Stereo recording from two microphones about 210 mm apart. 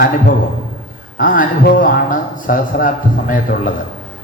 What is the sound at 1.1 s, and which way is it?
A man's voice, 40° left (ahead or behind).